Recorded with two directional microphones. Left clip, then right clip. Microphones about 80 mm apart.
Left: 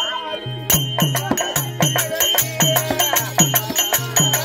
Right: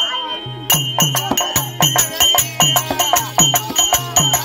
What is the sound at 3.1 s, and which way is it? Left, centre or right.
Music, centre.